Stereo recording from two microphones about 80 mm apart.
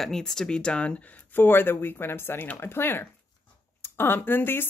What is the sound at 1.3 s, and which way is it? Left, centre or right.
Speech, left.